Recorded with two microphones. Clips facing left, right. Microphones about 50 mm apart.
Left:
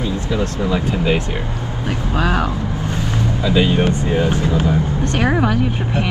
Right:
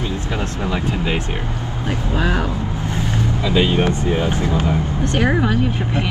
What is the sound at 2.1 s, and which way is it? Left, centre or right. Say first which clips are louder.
Speech: left 2 dB; left.